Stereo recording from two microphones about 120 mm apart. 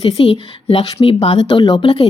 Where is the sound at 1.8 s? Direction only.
50° left (ahead or behind).